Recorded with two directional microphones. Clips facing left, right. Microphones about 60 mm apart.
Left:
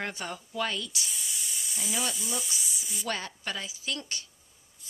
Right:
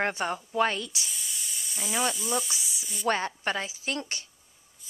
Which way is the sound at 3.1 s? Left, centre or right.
Right.